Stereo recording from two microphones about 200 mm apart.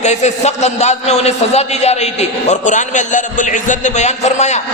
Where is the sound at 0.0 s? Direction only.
35° left (ahead or behind).